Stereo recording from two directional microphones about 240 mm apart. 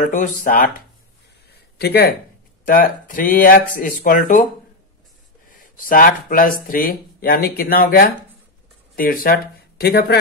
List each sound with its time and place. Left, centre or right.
0.0 s speech: left
5.5 s speech: left